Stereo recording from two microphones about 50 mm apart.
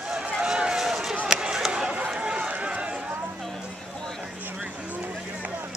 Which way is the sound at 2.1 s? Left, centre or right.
Centre.